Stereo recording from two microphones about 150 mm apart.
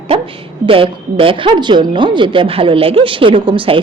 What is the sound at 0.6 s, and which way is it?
A woman's voice, 35° right (ahead or behind).